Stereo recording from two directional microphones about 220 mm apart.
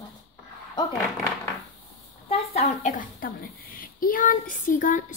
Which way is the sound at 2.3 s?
30° left (ahead or behind).